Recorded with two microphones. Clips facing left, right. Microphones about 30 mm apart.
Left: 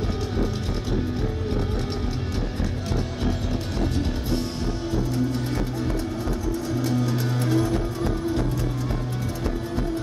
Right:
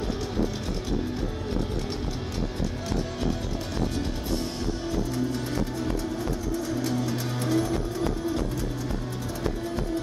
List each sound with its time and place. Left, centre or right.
6.8 s music: centre